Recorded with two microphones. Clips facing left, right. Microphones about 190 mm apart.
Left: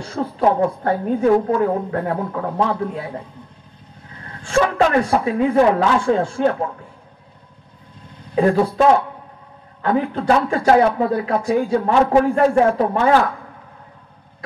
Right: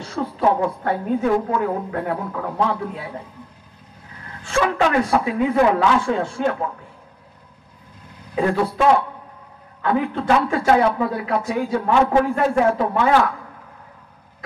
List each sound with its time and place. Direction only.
0.1 s a woman's voice: 35° left (ahead or behind)
4.4 s a woman's voice: 35° left (ahead or behind)
8.1 s a sound: 30° left (ahead or behind)
8.5 s a woman's voice: 40° left (ahead or behind)